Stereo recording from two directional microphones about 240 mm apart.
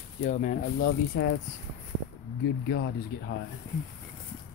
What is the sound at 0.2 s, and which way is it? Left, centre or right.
Speech, left.